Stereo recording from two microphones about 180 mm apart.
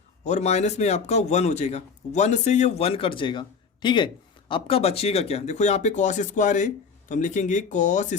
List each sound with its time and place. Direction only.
0.3 s speech: 40° left (ahead or behind)